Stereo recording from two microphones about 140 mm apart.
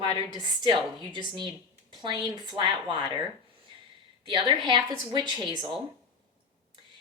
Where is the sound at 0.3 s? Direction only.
30° right (ahead or behind).